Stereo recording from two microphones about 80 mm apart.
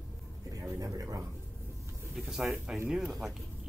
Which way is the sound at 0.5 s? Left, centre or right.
Right.